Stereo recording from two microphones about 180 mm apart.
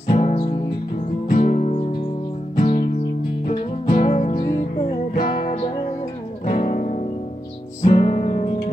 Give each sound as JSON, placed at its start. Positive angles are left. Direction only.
{"t": 0.1, "sound": "music", "side_deg": 35}
{"t": 6.4, "sound": "music", "side_deg": 45}